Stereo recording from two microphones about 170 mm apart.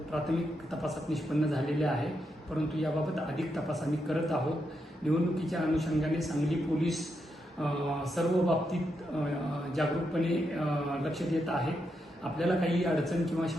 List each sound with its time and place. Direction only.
0.1 s a man's voice: centre (ahead or behind)
8.1 s a man's voice: centre (ahead or behind)